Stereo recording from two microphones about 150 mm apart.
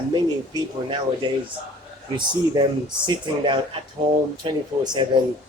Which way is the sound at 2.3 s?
30° right (ahead or behind).